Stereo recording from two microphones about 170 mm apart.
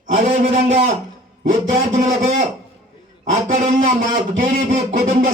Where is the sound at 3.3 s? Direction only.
45° right (ahead or behind).